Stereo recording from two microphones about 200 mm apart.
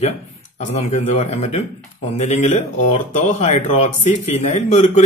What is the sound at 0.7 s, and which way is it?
Speech, 35° left (ahead or behind).